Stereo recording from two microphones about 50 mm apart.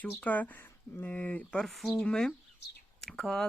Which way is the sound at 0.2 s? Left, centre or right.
Left.